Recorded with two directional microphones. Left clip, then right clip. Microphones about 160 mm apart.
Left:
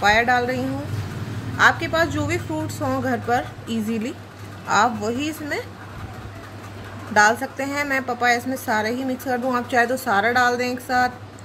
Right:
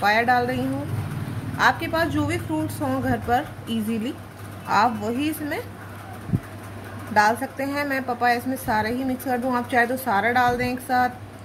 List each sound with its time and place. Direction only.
0.0 s a woman's voice: 10° left (ahead or behind)
1.6 s a woman's voice: 10° left (ahead or behind)
7.2 s a woman's voice: 15° left (ahead or behind)